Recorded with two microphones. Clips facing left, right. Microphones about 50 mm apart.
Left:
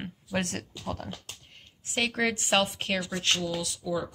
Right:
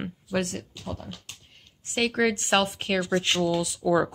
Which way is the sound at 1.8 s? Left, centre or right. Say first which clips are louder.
Right 4 dB; centre.